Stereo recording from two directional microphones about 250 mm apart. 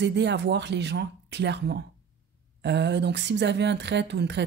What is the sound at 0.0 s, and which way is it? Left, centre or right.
Speech, right.